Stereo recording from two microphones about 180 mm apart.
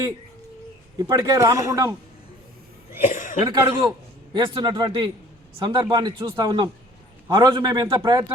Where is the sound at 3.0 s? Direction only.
45° left (ahead or behind).